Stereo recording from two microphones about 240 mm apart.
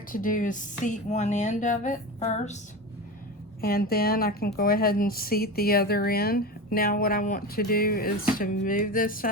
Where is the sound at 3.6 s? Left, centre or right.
Left.